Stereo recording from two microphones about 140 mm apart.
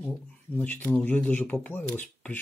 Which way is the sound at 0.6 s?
10° left (ahead or behind).